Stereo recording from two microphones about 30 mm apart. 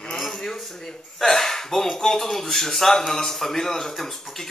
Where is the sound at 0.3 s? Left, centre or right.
Centre.